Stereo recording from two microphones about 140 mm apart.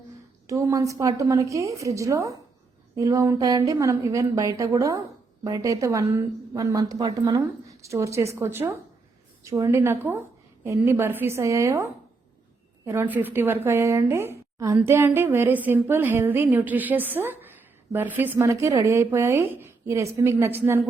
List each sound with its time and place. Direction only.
0.4 s a woman's voice: 20° right (ahead or behind)